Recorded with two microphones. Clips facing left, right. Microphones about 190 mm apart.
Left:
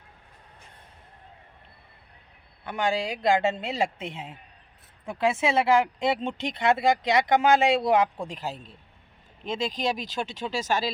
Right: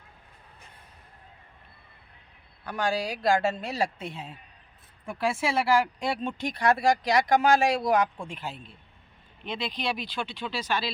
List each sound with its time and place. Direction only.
2.6 s speech: 20° left (ahead or behind); by 10.9 s 45° left (ahead or behind)